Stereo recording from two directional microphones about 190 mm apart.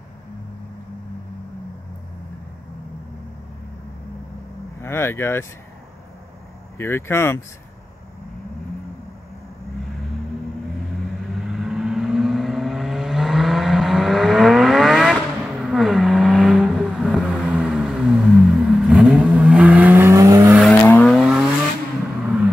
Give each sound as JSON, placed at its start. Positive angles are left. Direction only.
{"t": 4.8, "sound": "speech", "side_deg": 10}
{"t": 6.8, "sound": "speech", "side_deg": 15}
{"t": 11.4, "sound": "vehicle", "side_deg": 0}
{"t": 20.8, "sound": "vehicle", "side_deg": 10}